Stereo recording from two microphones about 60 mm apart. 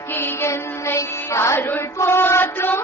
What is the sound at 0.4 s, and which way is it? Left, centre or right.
Music, left.